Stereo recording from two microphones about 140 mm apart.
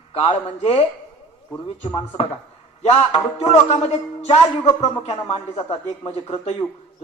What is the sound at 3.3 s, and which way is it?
A man's voice, 50° left (ahead or behind).